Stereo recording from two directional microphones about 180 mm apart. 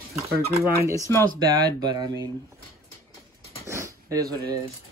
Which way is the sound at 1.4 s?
25° right (ahead or behind).